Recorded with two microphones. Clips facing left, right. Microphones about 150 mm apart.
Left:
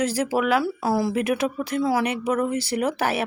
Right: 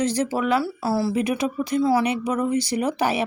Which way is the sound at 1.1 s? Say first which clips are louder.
Even; 5° left (ahead or behind).